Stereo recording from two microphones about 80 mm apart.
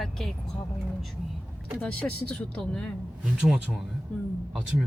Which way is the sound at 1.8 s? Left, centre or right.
Centre.